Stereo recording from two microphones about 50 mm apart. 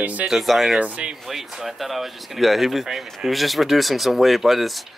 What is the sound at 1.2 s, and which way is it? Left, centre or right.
Speech, centre.